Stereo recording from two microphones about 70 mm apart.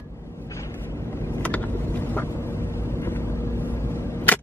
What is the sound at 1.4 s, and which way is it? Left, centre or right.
Vehicle, left.